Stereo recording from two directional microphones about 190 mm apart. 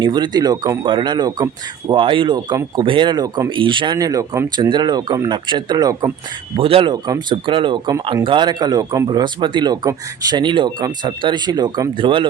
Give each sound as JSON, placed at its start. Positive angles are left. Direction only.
{"t": 0.0, "sound": "speech", "side_deg": -20}